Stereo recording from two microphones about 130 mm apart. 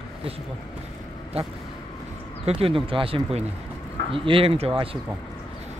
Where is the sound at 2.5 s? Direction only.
45° right (ahead or behind).